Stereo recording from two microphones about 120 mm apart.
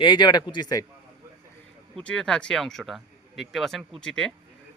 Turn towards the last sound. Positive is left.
turn(degrees=5)  # may be behind; listen again after turning